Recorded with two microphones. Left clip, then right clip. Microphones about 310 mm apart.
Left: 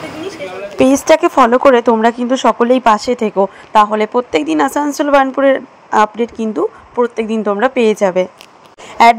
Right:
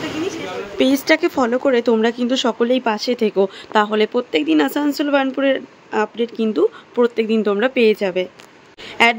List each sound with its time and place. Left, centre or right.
0.7 s speech: centre